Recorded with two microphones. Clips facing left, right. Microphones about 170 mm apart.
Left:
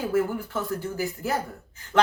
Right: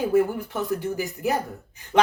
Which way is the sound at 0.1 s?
20° right (ahead or behind).